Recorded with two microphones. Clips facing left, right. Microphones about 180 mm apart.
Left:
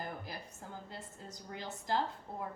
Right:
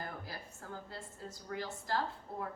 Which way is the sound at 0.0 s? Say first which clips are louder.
Left 1 dB; 15° left (ahead or behind).